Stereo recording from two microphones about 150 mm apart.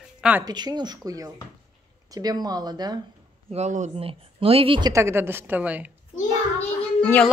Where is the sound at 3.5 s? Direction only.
50° right (ahead or behind).